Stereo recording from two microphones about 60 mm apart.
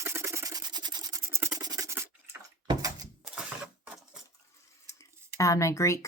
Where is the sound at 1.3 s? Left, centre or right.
Right.